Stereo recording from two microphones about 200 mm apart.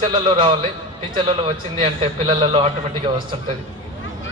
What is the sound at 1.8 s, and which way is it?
Speech, 30° right (ahead or behind).